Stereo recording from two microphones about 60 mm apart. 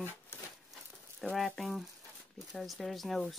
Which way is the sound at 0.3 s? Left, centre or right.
Left.